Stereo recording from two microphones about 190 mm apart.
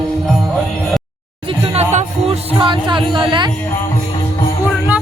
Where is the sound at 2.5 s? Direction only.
25° right (ahead or behind).